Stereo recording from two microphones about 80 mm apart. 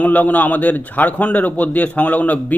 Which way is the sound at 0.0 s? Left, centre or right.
Centre.